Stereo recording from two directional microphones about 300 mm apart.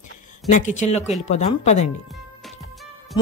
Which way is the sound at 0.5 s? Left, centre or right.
Left.